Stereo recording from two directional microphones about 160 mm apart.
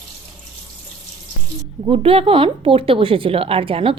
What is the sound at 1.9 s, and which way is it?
Speech, 40° right (ahead or behind).